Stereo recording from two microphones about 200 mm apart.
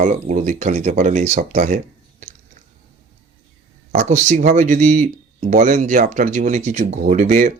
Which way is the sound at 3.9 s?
40° right (ahead or behind).